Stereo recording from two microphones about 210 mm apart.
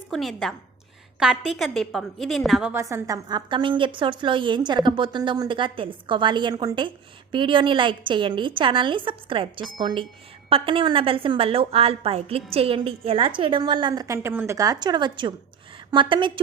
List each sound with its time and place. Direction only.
0.1 s a woman's voice: centre (ahead or behind)
2.8 s a woman's voice: 15° right (ahead or behind)